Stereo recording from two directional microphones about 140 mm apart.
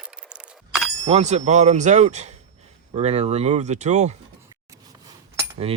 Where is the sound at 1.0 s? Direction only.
50° right (ahead or behind).